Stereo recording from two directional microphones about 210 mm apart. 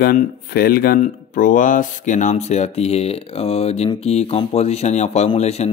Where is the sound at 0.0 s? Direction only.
45° left (ahead or behind).